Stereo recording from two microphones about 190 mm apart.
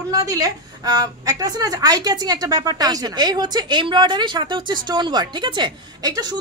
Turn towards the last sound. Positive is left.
turn(degrees=-20)  # may be behind; listen again after turning